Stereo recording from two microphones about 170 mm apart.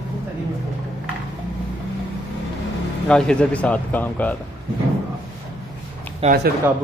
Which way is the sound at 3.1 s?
5° left (ahead or behind).